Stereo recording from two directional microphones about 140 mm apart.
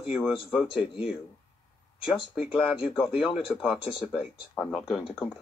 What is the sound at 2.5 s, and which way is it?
Speech, 5° right (ahead or behind).